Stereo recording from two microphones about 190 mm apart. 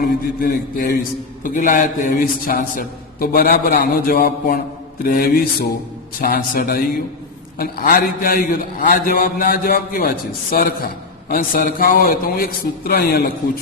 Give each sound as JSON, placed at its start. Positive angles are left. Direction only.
{"t": 0.0, "sound": "a man's voice", "side_deg": 50}